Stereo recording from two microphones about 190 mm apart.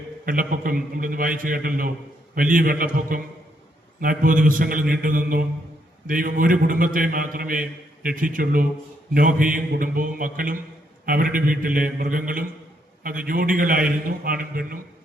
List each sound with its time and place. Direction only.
0.3 s a man's voice: 45° right (ahead or behind)